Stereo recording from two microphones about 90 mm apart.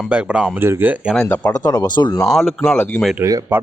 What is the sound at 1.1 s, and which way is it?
Speech, 10° left (ahead or behind).